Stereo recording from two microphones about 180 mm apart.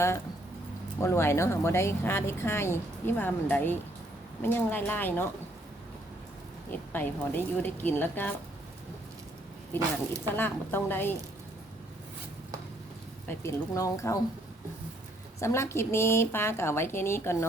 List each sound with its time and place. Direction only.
0.9 s speech: 15° left (ahead or behind)
6.7 s speech: 10° left (ahead or behind)
10.2 s speech: 10° left (ahead or behind)
13.2 s speech: 15° left (ahead or behind)
15.4 s speech: 15° left (ahead or behind)